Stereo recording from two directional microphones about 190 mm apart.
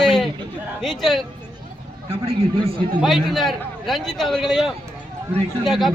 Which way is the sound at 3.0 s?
Centre (ahead or behind).